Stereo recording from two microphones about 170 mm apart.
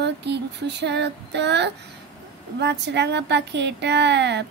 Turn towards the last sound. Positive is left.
turn(degrees=-90)